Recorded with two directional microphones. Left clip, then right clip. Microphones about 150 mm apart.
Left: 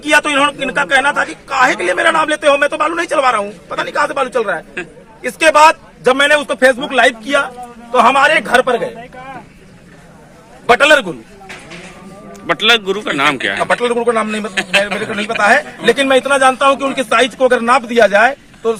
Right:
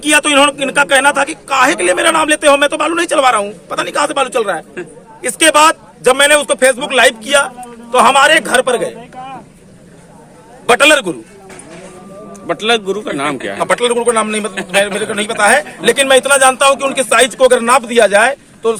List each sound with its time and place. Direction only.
0.3 s a man's voice: 35° right (ahead or behind)
4.8 s speech: 80° right
6.1 s a man's voice: 25° right (ahead or behind)
10.7 s a man's voice: 30° right (ahead or behind)
12.3 s a man's voice: centre (ahead or behind)
13.6 s a man's voice: 40° right (ahead or behind)